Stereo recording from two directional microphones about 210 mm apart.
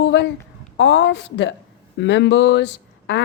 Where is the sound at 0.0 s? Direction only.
60° left (ahead or behind).